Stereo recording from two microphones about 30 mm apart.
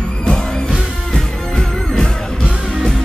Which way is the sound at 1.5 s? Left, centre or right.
Left.